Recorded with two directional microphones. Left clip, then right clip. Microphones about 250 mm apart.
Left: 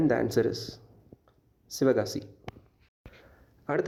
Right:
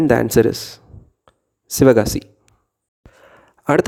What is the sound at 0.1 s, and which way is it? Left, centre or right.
Speech, right.